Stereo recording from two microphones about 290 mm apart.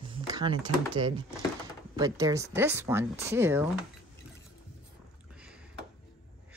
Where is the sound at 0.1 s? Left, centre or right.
Centre.